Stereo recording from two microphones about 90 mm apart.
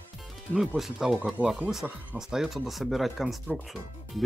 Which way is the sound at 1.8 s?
5° right (ahead or behind).